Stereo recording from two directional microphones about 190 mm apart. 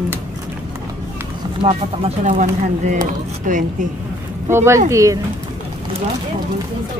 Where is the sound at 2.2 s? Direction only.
40° right (ahead or behind).